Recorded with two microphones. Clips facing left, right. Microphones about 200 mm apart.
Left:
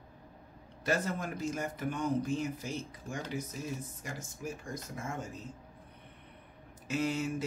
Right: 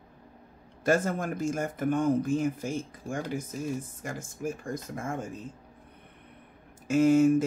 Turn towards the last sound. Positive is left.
turn(degrees=-50)  # may be behind; listen again after turning